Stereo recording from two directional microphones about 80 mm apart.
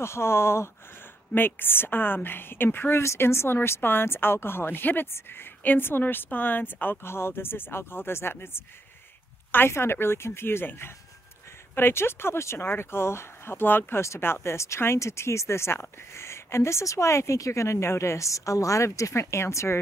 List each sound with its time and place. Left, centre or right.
0.0 s a woman's voice: left
9.5 s speech: left